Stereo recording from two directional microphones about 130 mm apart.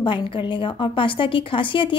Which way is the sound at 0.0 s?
40° left (ahead or behind).